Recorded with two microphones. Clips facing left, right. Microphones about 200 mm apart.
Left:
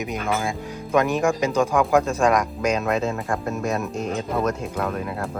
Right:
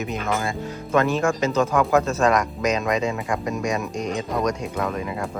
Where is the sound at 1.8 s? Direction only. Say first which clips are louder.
Left 1 dB; centre (ahead or behind).